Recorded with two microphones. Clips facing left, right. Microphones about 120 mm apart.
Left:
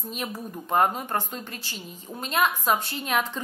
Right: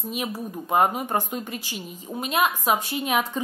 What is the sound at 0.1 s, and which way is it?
A woman's voice, 10° right (ahead or behind).